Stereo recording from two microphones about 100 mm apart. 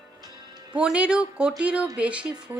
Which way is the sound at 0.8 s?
10° right (ahead or behind).